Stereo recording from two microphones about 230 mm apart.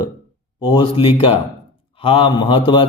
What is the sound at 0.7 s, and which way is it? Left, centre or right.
Speech, left.